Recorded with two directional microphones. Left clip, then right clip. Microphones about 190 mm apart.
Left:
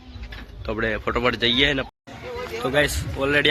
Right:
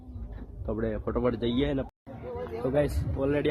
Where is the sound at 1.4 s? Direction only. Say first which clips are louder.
Left 10 dB; centre (ahead or behind).